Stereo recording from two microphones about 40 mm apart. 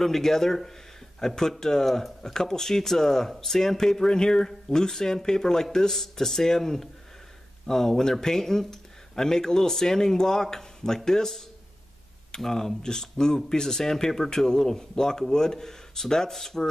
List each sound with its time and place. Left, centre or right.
0.0 s speech: centre